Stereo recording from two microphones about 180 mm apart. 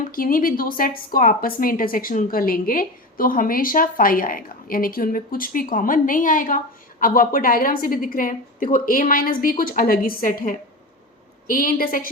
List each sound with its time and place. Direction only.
0.1 s a woman's voice: 50° left (ahead or behind)